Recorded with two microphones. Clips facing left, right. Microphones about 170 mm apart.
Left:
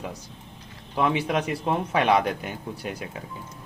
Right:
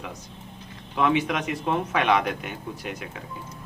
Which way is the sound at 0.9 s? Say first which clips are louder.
Right 1 dB; 30° left (ahead or behind).